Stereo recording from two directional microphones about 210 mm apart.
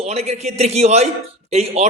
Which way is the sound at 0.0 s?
30° right (ahead or behind).